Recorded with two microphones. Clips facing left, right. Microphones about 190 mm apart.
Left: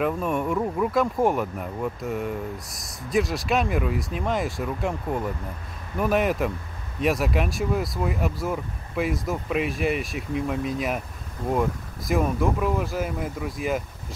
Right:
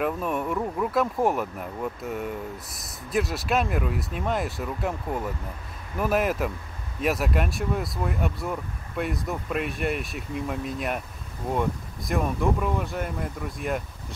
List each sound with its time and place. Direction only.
0.0 s speech: centre (ahead or behind)
12.1 s speech: centre (ahead or behind)